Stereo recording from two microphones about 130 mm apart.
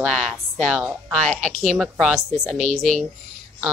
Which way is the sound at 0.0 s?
5° left (ahead or behind).